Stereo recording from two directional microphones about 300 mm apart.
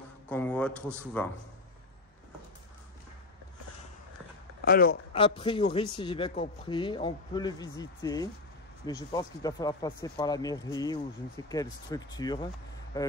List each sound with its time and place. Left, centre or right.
0.3 s a man's voice: centre
4.6 s speech: left
5.1 s a man's voice: centre